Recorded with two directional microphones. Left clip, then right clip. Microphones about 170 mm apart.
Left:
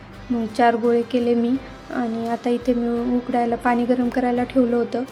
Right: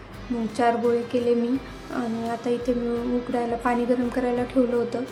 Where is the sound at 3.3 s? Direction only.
20° left (ahead or behind).